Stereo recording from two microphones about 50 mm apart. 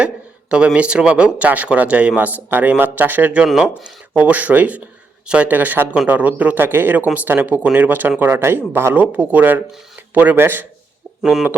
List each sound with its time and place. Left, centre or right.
0.5 s speech: right
3.6 s speech: right
6.6 s speech: right
9.0 s speech: right
11.2 s speech: centre